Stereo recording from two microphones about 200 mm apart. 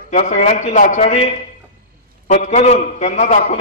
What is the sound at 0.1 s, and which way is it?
A man's voice, 40° left (ahead or behind).